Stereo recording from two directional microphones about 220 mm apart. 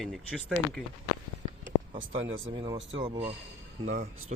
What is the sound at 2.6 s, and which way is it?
Speech, 25° right (ahead or behind).